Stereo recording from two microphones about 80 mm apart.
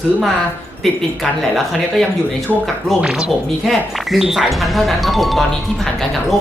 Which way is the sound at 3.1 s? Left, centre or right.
Centre.